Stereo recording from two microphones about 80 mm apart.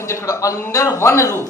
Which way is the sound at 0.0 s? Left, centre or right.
Left.